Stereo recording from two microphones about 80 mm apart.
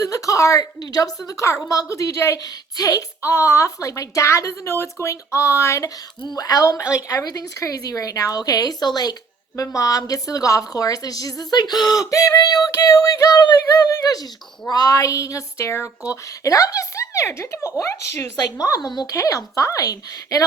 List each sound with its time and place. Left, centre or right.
0.0 s a woman's voice: left
0.8 s a woman's voice: left
1.3 s a woman's voice: left
3.2 s a woman's voice: left
6.2 s a woman's voice: left